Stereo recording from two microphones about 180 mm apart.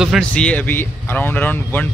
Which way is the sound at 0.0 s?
Centre (ahead or behind).